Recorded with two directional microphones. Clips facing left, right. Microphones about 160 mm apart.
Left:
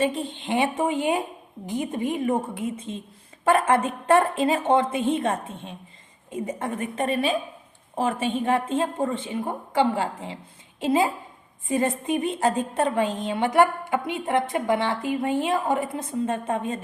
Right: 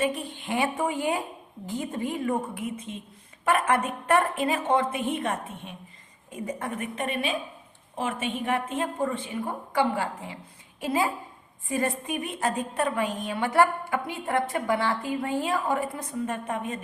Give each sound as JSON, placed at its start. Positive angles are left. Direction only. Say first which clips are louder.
{"t": 0.0, "sound": "a woman's voice", "louder": "left 3 dB", "side_deg": 25}